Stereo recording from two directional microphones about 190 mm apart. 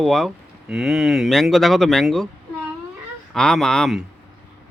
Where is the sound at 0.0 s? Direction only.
Centre (ahead or behind).